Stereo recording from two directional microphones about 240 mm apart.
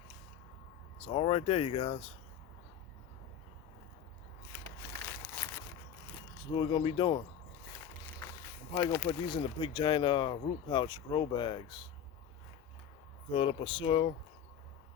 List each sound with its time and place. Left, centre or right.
1.0 s speech: left
6.5 s speech: centre
8.4 s a sound: centre
9.0 s speech: left
13.3 s speech: left